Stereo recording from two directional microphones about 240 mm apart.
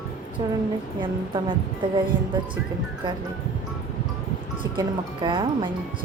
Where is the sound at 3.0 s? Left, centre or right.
Centre.